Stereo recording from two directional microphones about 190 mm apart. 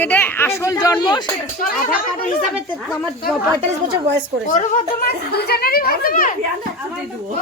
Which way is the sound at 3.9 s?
65° right (ahead or behind).